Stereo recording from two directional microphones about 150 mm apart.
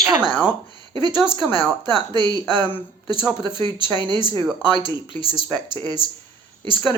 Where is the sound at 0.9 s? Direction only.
30° right (ahead or behind).